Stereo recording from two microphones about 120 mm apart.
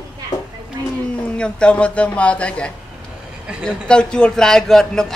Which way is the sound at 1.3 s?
10° left (ahead or behind).